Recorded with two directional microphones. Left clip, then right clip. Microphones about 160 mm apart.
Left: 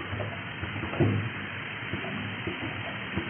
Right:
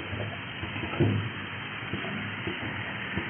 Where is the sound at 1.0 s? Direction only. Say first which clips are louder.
Left 1 dB; 20° left (ahead or behind).